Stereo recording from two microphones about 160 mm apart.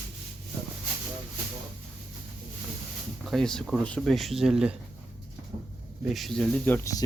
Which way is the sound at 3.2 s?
Centre (ahead or behind).